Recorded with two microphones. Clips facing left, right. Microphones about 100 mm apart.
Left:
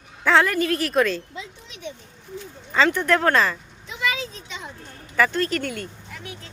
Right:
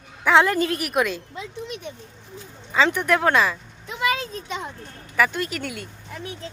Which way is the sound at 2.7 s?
15° right (ahead or behind).